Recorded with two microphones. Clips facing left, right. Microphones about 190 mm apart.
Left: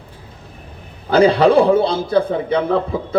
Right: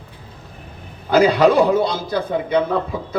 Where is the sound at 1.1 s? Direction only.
30° left (ahead or behind).